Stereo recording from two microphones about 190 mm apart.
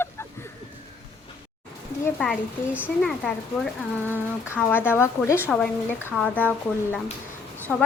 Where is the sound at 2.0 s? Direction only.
5° left (ahead or behind).